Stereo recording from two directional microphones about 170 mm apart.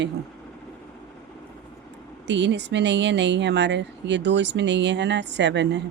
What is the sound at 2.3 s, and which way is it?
Music, 90° right.